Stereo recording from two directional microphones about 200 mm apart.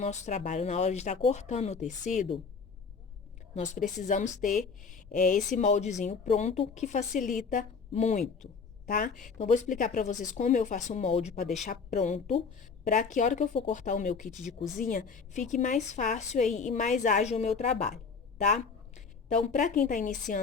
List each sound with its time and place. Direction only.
0.0 s a woman's voice: 35° left (ahead or behind)
3.5 s a woman's voice: 40° left (ahead or behind)
14.3 s speech: centre (ahead or behind)
14.8 s a woman's voice: 40° left (ahead or behind)